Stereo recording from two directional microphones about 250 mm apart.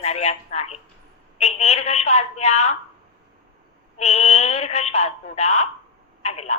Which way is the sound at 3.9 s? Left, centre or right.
Left.